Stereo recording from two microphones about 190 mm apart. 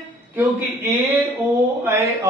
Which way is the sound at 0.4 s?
10° right (ahead or behind).